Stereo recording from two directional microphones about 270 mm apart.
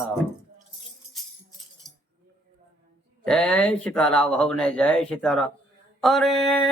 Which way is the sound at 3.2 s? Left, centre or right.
Centre.